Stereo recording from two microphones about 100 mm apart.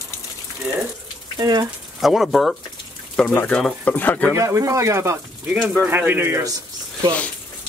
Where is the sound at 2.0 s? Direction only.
Centre (ahead or behind).